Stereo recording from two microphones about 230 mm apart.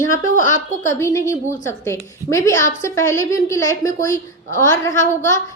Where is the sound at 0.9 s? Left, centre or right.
Centre.